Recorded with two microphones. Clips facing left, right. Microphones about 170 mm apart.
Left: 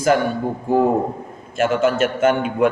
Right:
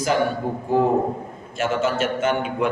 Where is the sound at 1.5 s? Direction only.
50° left (ahead or behind).